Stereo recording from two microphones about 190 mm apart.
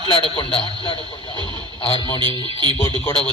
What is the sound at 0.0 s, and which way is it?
A man's voice, 25° left (ahead or behind).